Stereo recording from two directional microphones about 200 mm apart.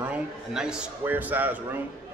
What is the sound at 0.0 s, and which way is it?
A man's voice, 5° right (ahead or behind).